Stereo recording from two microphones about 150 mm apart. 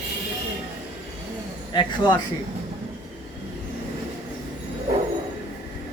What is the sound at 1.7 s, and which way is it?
Speech, 30° left (ahead or behind).